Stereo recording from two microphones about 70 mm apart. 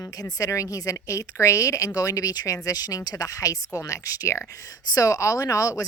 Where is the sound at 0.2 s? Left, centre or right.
Left.